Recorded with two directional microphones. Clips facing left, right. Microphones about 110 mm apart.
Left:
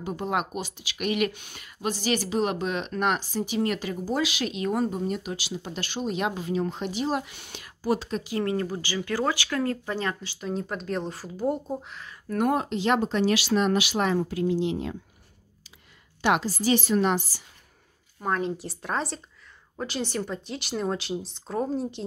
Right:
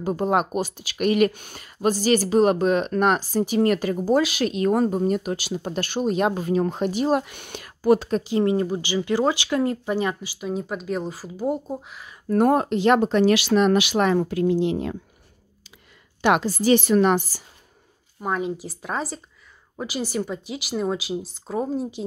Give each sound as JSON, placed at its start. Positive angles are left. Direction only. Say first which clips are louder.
{"t": 0.0, "sound": "speech", "louder": "right 7 dB", "side_deg": -40}
{"t": 8.2, "sound": "speech", "louder": "right 6 dB", "side_deg": -25}
{"t": 12.3, "sound": "speech", "louder": "right 6 dB", "side_deg": -40}
{"t": 16.2, "sound": "speech", "louder": "right 4 dB", "side_deg": -55}
{"t": 18.2, "sound": "speech", "louder": "right 2 dB", "side_deg": -5}